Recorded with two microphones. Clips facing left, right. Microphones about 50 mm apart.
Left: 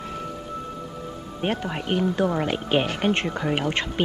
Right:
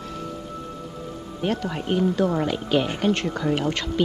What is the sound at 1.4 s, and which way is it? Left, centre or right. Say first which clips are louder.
A woman's voice: right 1 dB; left.